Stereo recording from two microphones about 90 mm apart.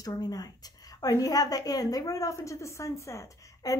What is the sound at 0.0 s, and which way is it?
A woman's voice, 45° left (ahead or behind).